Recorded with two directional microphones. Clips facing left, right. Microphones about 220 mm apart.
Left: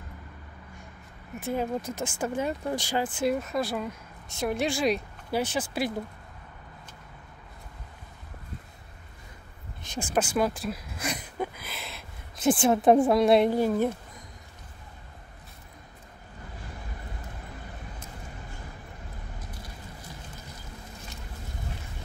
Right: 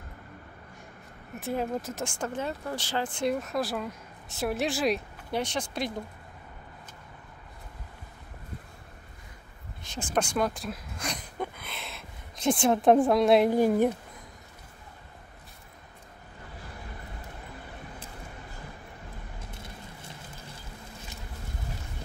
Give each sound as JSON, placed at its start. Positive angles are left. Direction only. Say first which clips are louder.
{"t": 1.4, "sound": "speech", "louder": "left 1 dB", "side_deg": 0}
{"t": 9.8, "sound": "speech", "louder": "left 2 dB", "side_deg": 10}
{"t": 13.5, "sound": "speech", "louder": "right 2 dB", "side_deg": -15}
{"t": 19.4, "sound": "a sound", "louder": "even", "side_deg": -25}